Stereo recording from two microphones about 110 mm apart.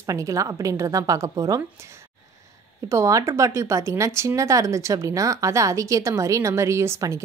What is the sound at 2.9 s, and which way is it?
A woman's voice, 30° right (ahead or behind).